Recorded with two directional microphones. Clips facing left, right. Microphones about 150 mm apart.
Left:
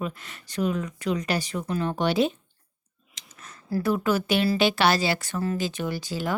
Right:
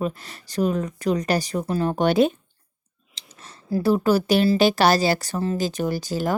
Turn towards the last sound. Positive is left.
turn(degrees=-40)  # may be behind; listen again after turning